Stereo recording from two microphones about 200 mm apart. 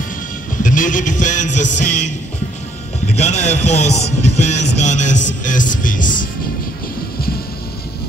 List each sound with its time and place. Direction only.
0.6 s speech: 40° left (ahead or behind)
3.2 s speech: 35° left (ahead or behind)